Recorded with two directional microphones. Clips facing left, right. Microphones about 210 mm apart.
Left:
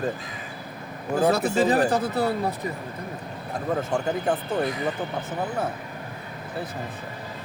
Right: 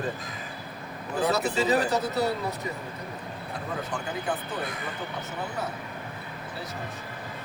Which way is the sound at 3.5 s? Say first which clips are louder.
Left 8 dB; 45° left (ahead or behind).